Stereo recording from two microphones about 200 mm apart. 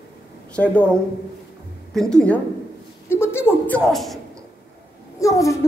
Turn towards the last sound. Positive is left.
turn(degrees=15)  # may be behind; listen again after turning